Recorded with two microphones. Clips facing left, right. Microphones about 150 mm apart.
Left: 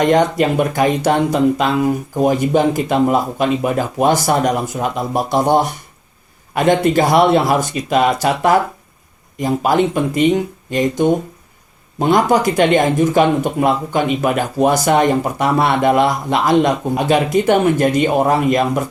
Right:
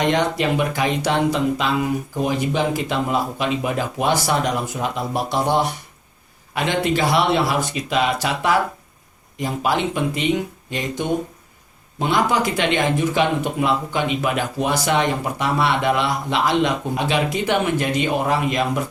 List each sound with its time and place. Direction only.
0.0 s speech: 45° left (ahead or behind)